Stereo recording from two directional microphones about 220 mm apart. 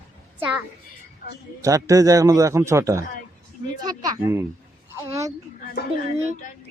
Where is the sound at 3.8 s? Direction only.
15° right (ahead or behind).